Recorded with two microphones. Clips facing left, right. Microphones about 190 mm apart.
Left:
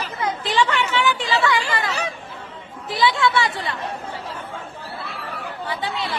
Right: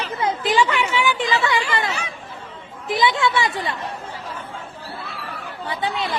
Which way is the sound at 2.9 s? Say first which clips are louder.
Even; 20° right (ahead or behind).